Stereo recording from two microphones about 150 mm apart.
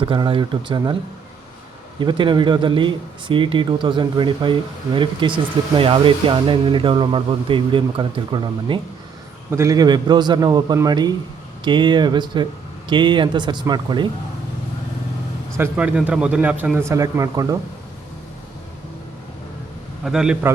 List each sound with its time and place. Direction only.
0.0 s speech: 30° right (ahead or behind)
2.0 s speech: 30° right (ahead or behind)
9.5 s a man's voice: 20° right (ahead or behind)
15.5 s speech: 10° right (ahead or behind)
16.9 s a man's voice: 20° right (ahead or behind)
20.1 s a man's voice: 5° right (ahead or behind)